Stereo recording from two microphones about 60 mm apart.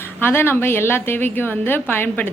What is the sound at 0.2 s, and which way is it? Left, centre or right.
A woman's voice, left.